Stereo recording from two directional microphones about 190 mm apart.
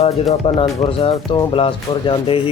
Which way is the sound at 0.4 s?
30° left (ahead or behind).